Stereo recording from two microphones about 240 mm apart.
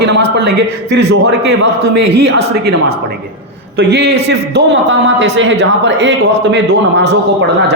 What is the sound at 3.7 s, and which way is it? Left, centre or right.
A man's voice, right.